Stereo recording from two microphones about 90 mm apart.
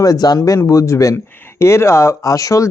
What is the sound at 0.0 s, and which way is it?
Speech, 45° left (ahead or behind).